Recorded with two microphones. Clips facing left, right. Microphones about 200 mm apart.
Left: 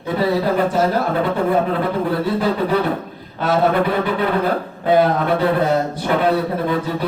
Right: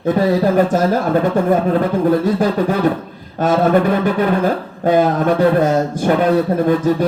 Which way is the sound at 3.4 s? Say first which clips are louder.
Right 3 dB; 45° right (ahead or behind).